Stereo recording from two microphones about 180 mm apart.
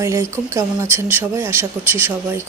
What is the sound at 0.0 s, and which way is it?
Speech, 15° right (ahead or behind).